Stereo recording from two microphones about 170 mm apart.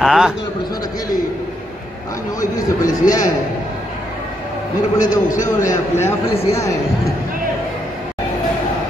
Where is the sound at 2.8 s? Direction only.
20° left (ahead or behind).